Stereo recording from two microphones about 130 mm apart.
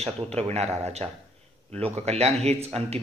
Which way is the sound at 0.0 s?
55° right (ahead or behind).